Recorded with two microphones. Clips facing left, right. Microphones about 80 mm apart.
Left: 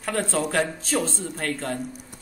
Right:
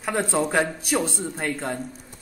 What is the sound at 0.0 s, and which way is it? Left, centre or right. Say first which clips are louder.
A man's voice: right 2 dB; centre.